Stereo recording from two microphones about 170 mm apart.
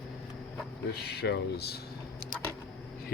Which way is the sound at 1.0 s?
70° left (ahead or behind).